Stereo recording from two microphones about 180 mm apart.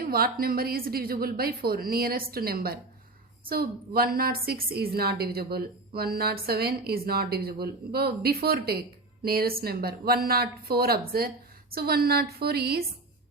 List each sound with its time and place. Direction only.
0.0 s a woman's voice: 55° right (ahead or behind)